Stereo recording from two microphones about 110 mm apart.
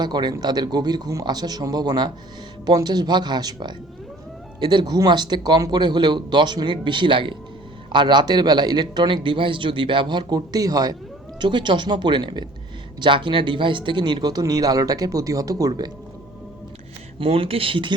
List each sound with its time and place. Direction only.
0.0 s a man's voice: 40° right (ahead or behind)
11.3 s a man's voice: 45° right (ahead or behind)
17.2 s speech: 55° right (ahead or behind)